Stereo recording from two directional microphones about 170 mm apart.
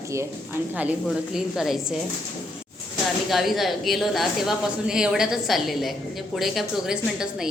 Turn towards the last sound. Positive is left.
turn(degrees=-5)  # may be behind; listen again after turning